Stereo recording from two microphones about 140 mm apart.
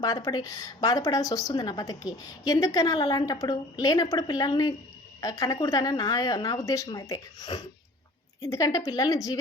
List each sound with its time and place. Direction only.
0.0 s a woman's voice: 25° left (ahead or behind)